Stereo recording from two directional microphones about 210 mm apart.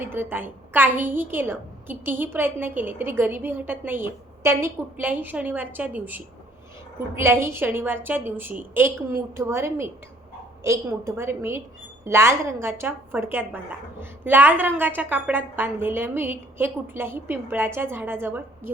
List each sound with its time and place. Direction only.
0.0 s a woman's voice: 10° right (ahead or behind)